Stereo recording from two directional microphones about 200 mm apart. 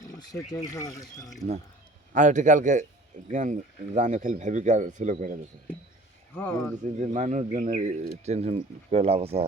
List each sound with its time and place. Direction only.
0.0 s speech: 20° left (ahead or behind)
2.1 s speech: 40° right (ahead or behind)
6.8 s speech: 35° right (ahead or behind)